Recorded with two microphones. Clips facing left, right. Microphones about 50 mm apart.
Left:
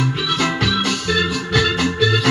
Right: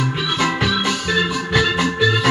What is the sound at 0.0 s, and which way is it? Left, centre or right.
Music, centre.